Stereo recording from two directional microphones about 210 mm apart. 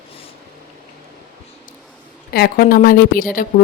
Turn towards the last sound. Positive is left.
turn(degrees=40)  # may be behind; listen again after turning